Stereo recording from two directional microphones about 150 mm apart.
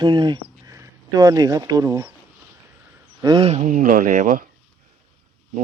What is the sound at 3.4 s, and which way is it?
Speech, 45° right (ahead or behind).